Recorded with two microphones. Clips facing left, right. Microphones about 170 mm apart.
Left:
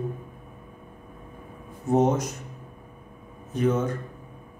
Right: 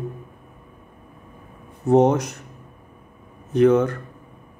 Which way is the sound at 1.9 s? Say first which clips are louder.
Right 6 dB; 65° right (ahead or behind).